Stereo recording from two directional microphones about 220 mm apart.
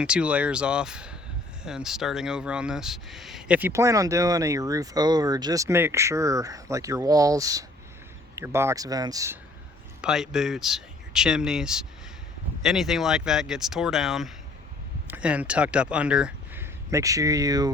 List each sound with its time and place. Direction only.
0.0 s speech: 5° right (ahead or behind)
10.0 s speech: centre (ahead or behind)